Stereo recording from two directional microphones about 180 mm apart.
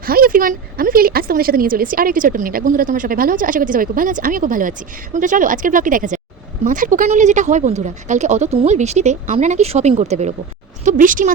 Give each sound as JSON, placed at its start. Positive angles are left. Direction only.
{"t": 0.0, "sound": "speech", "side_deg": -55}